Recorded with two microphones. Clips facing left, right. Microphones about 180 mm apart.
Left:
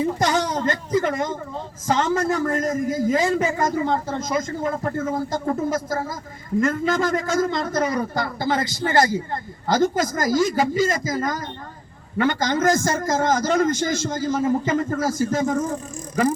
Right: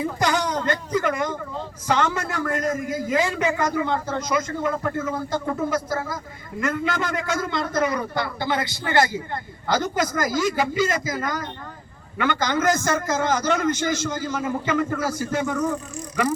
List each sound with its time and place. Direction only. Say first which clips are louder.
0.2 s a man's voice: left 2 dB; 45° left (ahead or behind)